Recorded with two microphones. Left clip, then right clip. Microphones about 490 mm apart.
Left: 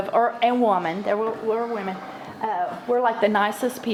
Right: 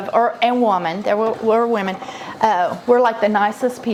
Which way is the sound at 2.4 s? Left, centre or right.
Right.